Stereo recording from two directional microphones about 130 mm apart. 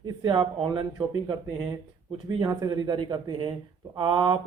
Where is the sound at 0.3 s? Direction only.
35° right (ahead or behind).